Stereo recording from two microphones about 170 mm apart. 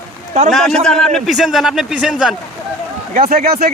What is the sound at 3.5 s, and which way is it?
Speech, 60° right (ahead or behind).